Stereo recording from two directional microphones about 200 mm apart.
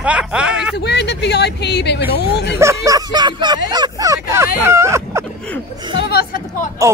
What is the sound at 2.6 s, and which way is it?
Speech, 15° right (ahead or behind).